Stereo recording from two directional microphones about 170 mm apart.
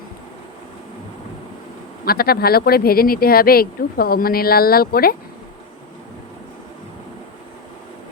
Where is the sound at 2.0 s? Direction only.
60° left (ahead or behind).